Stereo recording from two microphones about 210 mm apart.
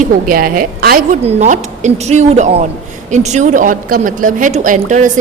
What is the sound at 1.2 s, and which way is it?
A woman's voice, 35° right (ahead or behind).